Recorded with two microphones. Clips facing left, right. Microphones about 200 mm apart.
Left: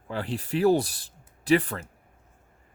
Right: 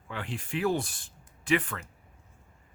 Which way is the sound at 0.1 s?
35° left (ahead or behind).